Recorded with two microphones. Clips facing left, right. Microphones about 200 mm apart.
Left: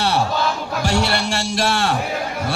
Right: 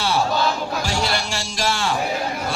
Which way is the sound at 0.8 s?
65° left (ahead or behind).